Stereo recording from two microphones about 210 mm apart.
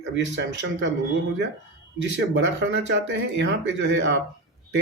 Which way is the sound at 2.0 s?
60° right (ahead or behind).